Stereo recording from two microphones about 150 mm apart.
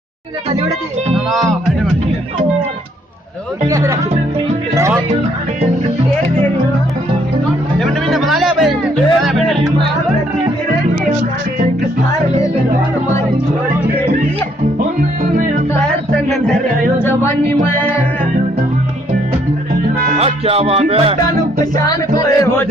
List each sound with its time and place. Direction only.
3.6 s speech: 20° right (ahead or behind)
4.7 s music: 20° right (ahead or behind)
7.8 s music: centre (ahead or behind)
15.3 s music: 55° right (ahead or behind)
15.8 s music: centre (ahead or behind)
17.0 s a sound: 15° left (ahead or behind)
20.2 s music: 45° right (ahead or behind)
21.7 s music: 25° left (ahead or behind)